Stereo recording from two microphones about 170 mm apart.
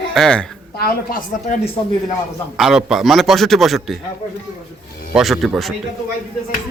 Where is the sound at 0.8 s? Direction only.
60° left (ahead or behind).